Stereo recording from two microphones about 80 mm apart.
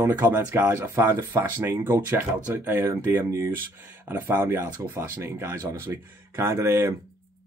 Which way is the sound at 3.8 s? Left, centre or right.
Right.